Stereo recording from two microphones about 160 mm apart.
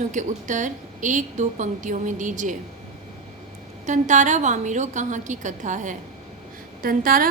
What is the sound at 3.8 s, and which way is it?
A woman's voice, 50° right (ahead or behind).